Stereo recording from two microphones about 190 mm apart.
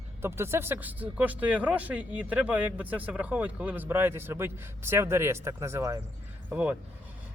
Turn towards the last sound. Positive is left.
turn(degrees=-5)  # may be behind; listen again after turning